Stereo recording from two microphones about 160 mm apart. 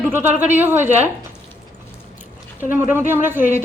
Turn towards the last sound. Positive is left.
turn(degrees=-10)  # may be behind; listen again after turning